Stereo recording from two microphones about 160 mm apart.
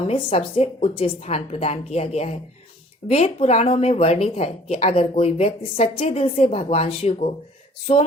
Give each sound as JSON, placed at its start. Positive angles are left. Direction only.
{"t": 0.1, "sound": "speech", "side_deg": 40}